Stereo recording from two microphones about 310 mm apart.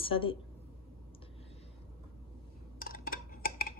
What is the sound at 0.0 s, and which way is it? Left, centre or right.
Speech, centre.